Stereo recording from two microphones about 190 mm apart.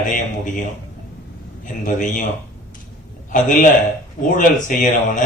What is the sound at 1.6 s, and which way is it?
Speech, 40° left (ahead or behind).